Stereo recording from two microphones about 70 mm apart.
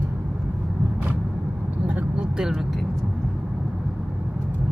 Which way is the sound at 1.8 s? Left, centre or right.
Centre.